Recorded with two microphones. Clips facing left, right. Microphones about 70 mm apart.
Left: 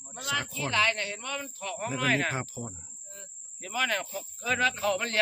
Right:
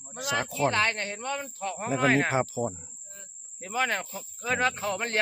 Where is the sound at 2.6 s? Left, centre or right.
Right.